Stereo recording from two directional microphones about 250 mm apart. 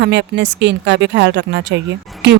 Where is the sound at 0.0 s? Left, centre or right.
Right.